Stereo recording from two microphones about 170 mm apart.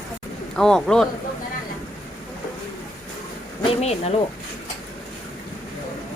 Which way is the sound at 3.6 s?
40° left (ahead or behind).